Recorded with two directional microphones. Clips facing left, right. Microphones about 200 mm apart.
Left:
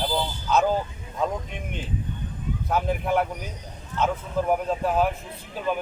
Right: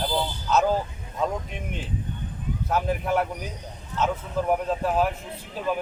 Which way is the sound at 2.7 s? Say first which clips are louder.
Even; centre (ahead or behind).